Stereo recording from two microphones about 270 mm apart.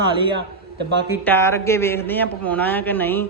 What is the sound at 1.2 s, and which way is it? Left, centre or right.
A man's voice, centre.